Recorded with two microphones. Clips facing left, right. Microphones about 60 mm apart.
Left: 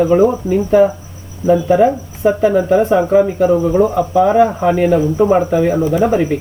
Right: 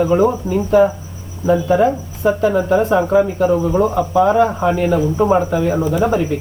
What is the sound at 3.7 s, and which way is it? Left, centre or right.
Speech, centre.